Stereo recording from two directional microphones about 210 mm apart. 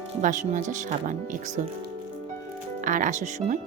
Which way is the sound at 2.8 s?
40° right (ahead or behind).